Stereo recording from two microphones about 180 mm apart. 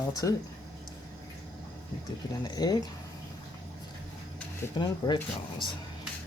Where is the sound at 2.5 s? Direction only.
20° left (ahead or behind).